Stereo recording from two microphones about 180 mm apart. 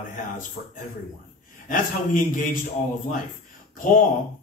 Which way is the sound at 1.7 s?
50° left (ahead or behind).